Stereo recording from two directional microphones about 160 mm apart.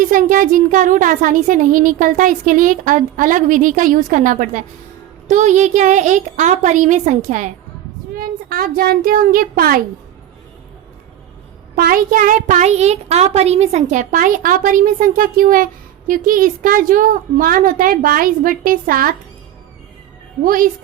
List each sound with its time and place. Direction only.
0.0 s a child's voice: 55° right (ahead or behind)
8.1 s a child's voice: 65° right (ahead or behind)
11.8 s a child's voice: 60° right (ahead or behind)
20.4 s a child's voice: 60° right (ahead or behind)